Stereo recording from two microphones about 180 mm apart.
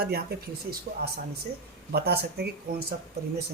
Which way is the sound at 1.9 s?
60° right (ahead or behind).